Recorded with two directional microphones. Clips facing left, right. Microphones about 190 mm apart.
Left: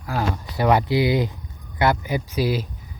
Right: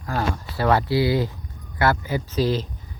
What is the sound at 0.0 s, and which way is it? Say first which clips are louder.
Speech: even; 10° left (ahead or behind).